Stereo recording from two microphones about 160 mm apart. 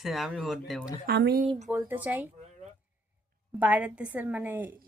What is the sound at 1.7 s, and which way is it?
Speech, 15° right (ahead or behind).